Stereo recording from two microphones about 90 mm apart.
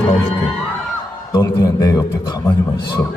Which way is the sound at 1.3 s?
40° left (ahead or behind).